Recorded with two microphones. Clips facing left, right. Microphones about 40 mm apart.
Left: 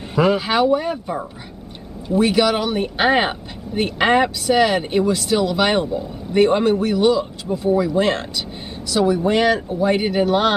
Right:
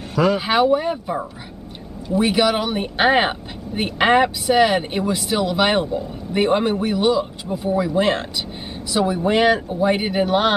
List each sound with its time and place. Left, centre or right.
0.1 s speech: centre
0.5 s speech: centre